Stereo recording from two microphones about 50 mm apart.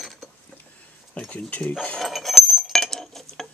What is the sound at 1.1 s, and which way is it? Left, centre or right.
Cutlery, left.